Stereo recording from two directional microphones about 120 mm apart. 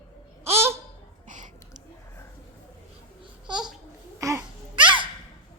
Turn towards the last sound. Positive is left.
turn(degrees=-40)  # may be behind; listen again after turning